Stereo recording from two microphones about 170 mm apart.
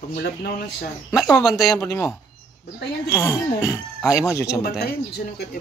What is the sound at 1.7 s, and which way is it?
Speech, 15° left (ahead or behind).